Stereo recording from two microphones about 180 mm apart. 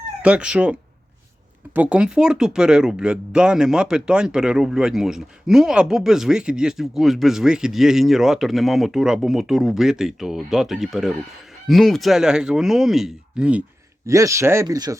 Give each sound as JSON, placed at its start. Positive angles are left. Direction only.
{"t": 0.2, "sound": "speech", "side_deg": -5}
{"t": 14.1, "sound": "speech", "side_deg": -15}